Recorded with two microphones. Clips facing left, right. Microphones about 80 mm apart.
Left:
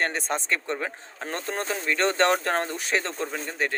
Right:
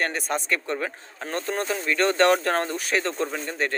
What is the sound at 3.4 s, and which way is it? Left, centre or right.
Speech, centre.